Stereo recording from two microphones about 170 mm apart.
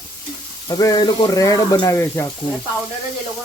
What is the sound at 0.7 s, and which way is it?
Speech, 20° left (ahead or behind).